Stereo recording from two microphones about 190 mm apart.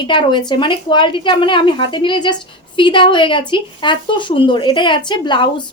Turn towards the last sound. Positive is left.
turn(degrees=25)  # may be behind; listen again after turning